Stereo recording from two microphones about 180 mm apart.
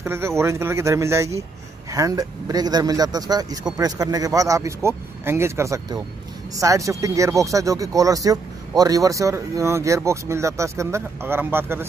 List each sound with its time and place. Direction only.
0.0 s speech: 15° right (ahead or behind)